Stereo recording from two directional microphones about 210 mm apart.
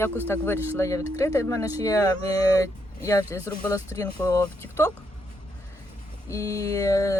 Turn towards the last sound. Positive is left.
turn(degrees=15)  # may be behind; listen again after turning